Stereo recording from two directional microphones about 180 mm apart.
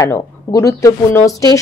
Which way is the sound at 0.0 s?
20° left (ahead or behind).